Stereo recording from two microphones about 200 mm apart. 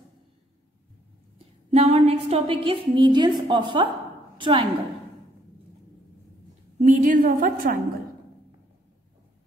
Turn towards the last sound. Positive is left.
turn(degrees=-45)  # may be behind; listen again after turning